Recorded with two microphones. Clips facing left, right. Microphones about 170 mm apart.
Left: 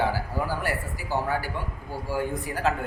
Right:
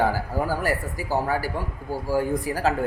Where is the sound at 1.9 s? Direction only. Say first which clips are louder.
Right 6 dB; 40° right (ahead or behind).